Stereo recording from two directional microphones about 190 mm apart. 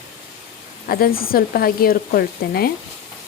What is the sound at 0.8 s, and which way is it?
Speech, 50° left (ahead or behind).